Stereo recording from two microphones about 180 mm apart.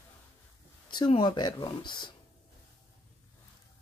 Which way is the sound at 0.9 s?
25° left (ahead or behind).